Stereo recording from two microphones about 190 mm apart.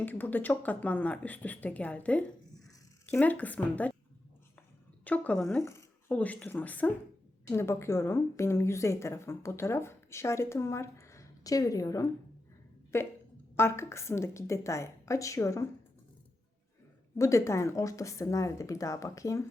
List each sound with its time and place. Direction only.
0.0 s a woman's voice: 10° left (ahead or behind)
5.0 s a woman's voice: 10° left (ahead or behind)
17.2 s a woman's voice: 15° left (ahead or behind)